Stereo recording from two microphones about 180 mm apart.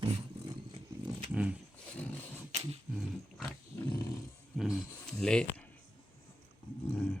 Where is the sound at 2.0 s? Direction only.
10° left (ahead or behind).